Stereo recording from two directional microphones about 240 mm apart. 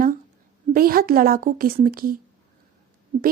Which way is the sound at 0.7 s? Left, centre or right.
Right.